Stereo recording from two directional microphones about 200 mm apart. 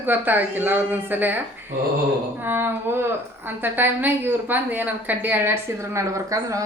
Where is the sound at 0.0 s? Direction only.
10° right (ahead or behind).